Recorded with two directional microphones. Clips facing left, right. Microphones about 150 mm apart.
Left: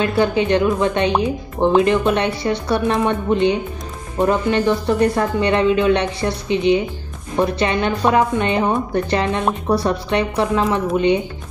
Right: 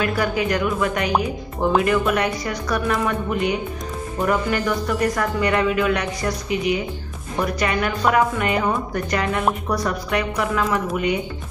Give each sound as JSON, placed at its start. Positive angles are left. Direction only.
{"t": 0.0, "sound": "speech", "side_deg": 25}